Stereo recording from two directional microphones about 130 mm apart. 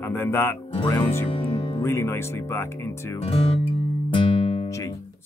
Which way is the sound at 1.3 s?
45° left (ahead or behind).